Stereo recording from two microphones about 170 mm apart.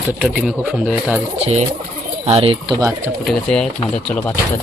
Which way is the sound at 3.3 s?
5° left (ahead or behind).